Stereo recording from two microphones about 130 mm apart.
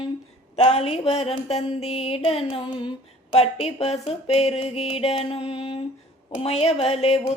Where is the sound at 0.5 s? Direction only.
55° left (ahead or behind); by 2.9 s 40° left (ahead or behind).